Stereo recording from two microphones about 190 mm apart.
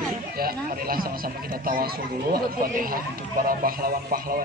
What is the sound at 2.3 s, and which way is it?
A man's voice, 50° right (ahead or behind).